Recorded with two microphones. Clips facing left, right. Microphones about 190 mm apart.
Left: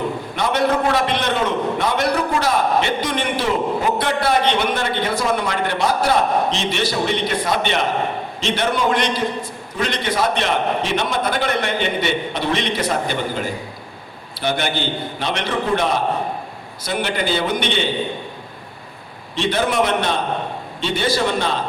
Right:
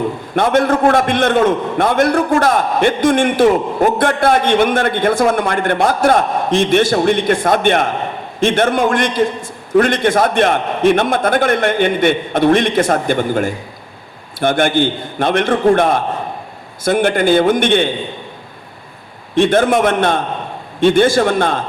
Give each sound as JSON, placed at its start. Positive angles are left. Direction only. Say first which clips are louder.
{"t": 0.3, "sound": "a man's voice", "louder": "right 6 dB", "side_deg": -50}
{"t": 19.3, "sound": "a man's voice", "louder": "right 8 dB", "side_deg": -50}